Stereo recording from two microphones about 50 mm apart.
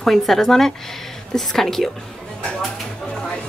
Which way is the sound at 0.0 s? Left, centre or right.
Centre.